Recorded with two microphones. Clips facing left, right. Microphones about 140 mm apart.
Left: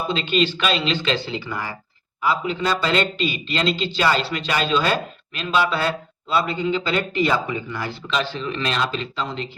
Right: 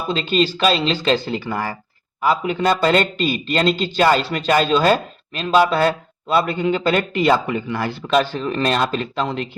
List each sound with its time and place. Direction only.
0.1 s a man's voice: 40° right (ahead or behind); by 9.5 s 60° right (ahead or behind)